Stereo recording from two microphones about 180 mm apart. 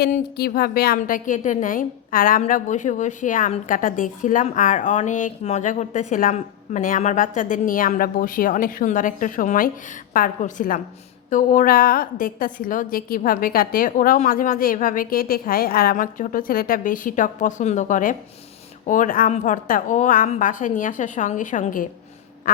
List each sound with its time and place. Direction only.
0.0 s speech: 60° left (ahead or behind)
22.5 s quack: 50° left (ahead or behind)